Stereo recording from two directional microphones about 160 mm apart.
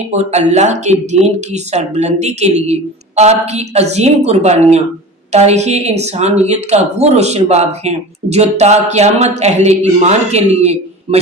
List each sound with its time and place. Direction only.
0.1 s speech: 45° right (ahead or behind)